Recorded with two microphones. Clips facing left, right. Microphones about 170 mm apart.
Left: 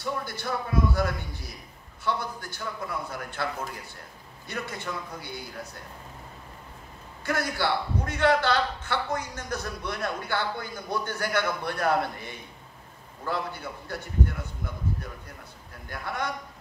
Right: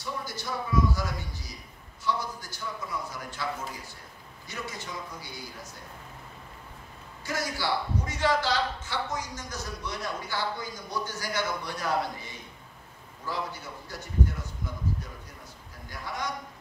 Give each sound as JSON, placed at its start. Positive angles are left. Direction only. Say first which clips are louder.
{"t": 0.0, "sound": "a man's voice", "louder": "left 4 dB", "side_deg": 60}
{"t": 4.5, "sound": "a man's voice", "louder": "left 4 dB", "side_deg": 60}
{"t": 7.2, "sound": "a man's voice", "louder": "left 3 dB", "side_deg": 60}
{"t": 15.9, "sound": "a man's voice", "louder": "left 3 dB", "side_deg": 60}